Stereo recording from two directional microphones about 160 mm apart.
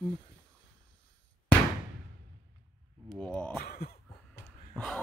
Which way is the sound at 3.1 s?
5° left (ahead or behind).